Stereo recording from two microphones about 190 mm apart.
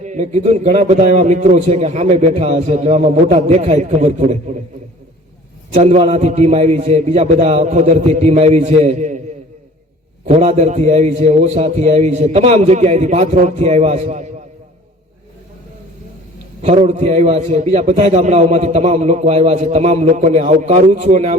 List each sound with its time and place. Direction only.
0.0 s a man's voice: 35° right (ahead or behind)
5.7 s a man's voice: 35° right (ahead or behind)
10.2 s a man's voice: 30° right (ahead or behind)
16.6 s a man's voice: 35° right (ahead or behind)